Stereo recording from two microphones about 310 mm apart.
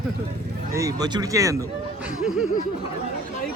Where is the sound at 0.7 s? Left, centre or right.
Centre.